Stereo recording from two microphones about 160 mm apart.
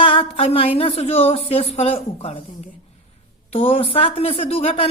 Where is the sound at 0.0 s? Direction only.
35° left (ahead or behind).